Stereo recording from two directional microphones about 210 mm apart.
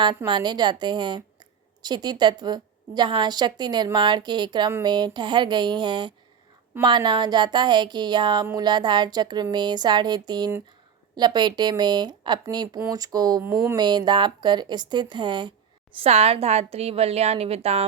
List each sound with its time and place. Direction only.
0.3 s speech: 20° right (ahead or behind)